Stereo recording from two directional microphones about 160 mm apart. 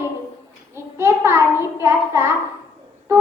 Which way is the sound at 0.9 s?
15° right (ahead or behind).